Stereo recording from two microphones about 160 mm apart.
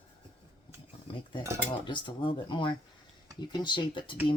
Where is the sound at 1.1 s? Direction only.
30° left (ahead or behind).